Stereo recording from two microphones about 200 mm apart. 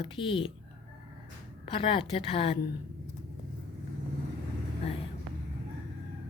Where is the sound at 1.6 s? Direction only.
25° left (ahead or behind).